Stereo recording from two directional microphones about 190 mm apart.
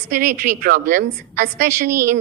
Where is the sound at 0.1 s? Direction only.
45° right (ahead or behind).